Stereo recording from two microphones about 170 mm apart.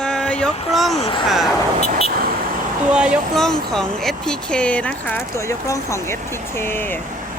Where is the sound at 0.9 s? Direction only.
30° left (ahead or behind).